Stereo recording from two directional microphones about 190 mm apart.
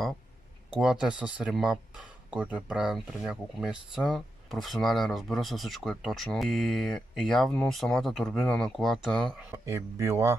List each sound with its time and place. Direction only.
0.7 s speech: 5° right (ahead or behind)
9.7 s speech: 15° right (ahead or behind)